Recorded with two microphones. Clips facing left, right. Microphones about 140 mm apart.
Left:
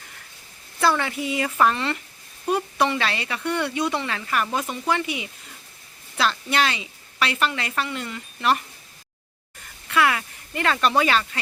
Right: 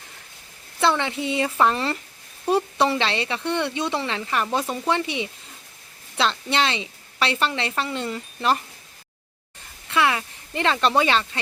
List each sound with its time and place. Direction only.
0.8 s speech: 25° right (ahead or behind)
9.9 s speech: 25° right (ahead or behind)